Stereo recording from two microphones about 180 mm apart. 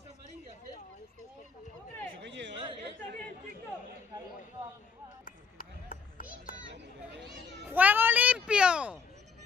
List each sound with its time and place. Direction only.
2.2 s a sound: 80° right
5.2 s chop: 50° left (ahead or behind)
6.7 s children playing: 75° right (ahead or behind)
7.6 s children playing: 10° right (ahead or behind)